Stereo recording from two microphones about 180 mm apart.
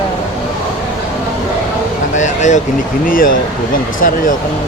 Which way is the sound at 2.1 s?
45° left (ahead or behind).